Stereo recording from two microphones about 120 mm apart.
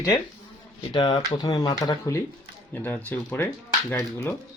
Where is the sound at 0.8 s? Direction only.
45° left (ahead or behind); by 2.2 s 25° left (ahead or behind).